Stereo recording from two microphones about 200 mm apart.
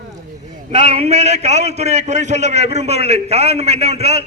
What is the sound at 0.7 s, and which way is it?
A man's voice, 30° right (ahead or behind).